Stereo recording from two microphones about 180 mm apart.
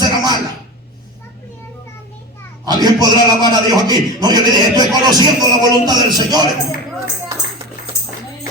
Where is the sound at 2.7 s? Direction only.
25° right (ahead or behind).